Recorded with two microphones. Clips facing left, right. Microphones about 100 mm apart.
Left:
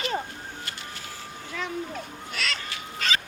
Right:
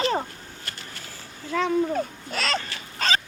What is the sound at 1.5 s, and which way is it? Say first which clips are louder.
Speech: right 9 dB; 55° right (ahead or behind).